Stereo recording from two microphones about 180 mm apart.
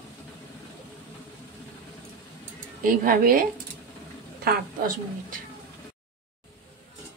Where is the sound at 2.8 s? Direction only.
50° right (ahead or behind).